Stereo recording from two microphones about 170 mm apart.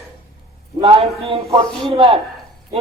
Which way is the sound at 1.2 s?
35° right (ahead or behind).